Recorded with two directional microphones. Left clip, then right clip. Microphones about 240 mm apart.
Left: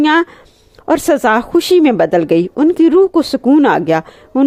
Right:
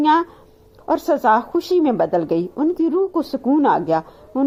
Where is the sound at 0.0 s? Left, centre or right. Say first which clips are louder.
Left 4 dB; left.